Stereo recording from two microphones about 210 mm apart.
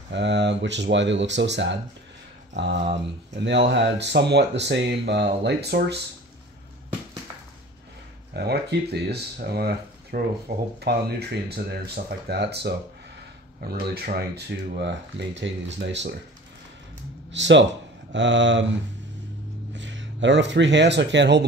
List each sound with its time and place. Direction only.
0.1 s speech: 55° right (ahead or behind)
3.3 s speech: 60° right (ahead or behind)
8.3 s speech: 50° right (ahead or behind)
17.3 s speech: 60° right (ahead or behind)
19.7 s speech: 60° right (ahead or behind)